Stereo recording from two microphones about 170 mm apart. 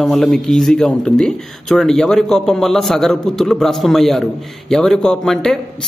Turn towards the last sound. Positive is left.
turn(degrees=5)  # may be behind; listen again after turning